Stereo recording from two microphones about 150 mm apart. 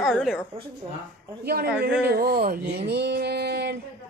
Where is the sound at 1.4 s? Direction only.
90° right.